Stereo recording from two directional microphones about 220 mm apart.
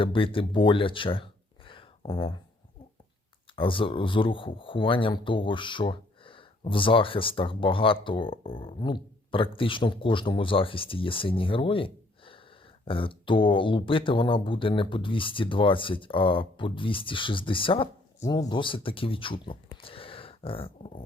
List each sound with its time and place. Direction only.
0.0 s speech: 25° left (ahead or behind)
3.5 s speech: 25° left (ahead or behind)
19.7 s a sound: 25° left (ahead or behind)